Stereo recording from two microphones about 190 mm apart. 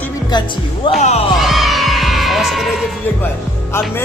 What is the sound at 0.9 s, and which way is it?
Speech, 35° left (ahead or behind).